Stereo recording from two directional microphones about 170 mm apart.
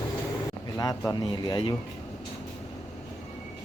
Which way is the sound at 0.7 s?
20° left (ahead or behind).